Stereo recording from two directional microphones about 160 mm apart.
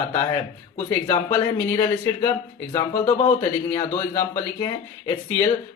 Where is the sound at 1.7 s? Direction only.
25° left (ahead or behind).